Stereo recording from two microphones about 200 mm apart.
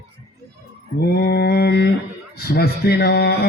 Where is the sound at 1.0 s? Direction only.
55° left (ahead or behind).